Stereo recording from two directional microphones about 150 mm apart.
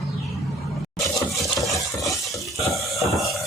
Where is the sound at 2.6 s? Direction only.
Centre (ahead or behind).